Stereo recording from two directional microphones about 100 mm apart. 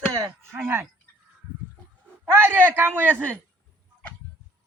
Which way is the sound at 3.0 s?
15° left (ahead or behind).